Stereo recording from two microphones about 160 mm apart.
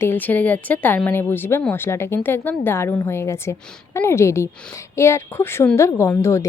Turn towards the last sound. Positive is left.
turn(degrees=15)  # may be behind; listen again after turning